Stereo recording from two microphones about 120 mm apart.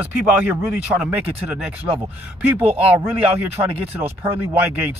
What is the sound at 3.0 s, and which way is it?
Speech, 20° right (ahead or behind).